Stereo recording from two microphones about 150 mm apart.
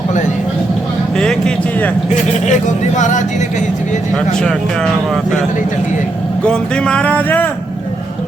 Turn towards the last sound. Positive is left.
turn(degrees=10)  # may be behind; listen again after turning